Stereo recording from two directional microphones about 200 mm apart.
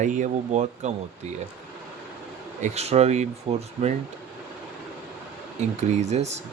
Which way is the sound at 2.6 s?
30° right (ahead or behind).